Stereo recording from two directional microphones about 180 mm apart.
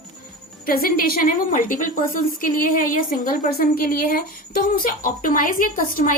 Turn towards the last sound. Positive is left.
turn(degrees=50)  # may be behind; listen again after turning